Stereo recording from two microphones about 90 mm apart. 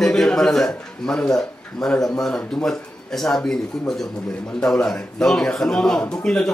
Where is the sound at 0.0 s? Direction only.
5° left (ahead or behind).